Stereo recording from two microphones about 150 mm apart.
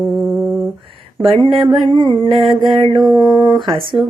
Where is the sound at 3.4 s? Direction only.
30° right (ahead or behind).